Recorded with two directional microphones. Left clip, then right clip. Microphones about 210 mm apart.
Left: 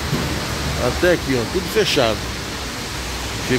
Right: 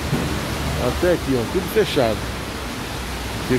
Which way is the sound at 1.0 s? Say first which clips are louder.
Left 2 dB; centre (ahead or behind).